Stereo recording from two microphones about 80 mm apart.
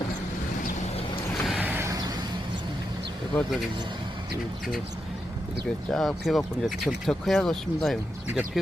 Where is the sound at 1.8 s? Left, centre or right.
Right.